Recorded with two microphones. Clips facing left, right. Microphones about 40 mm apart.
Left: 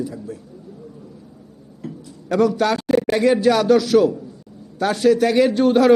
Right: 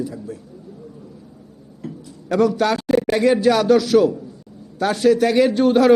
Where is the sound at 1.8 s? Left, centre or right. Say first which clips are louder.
Even; centre.